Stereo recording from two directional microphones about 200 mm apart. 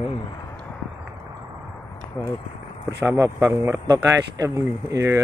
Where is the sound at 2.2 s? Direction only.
15° left (ahead or behind).